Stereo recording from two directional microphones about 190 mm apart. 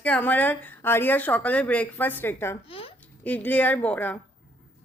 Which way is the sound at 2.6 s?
30° left (ahead or behind).